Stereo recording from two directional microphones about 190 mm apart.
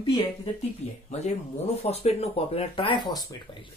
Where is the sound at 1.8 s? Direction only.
35° left (ahead or behind).